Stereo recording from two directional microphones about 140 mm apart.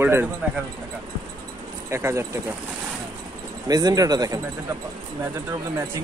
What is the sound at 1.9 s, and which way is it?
Speech, 20° right (ahead or behind).